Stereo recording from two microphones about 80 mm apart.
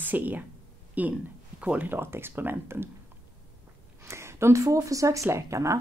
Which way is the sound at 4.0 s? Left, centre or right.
Right.